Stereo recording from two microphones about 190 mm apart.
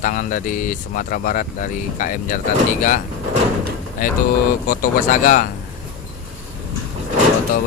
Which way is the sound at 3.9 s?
45° left (ahead or behind).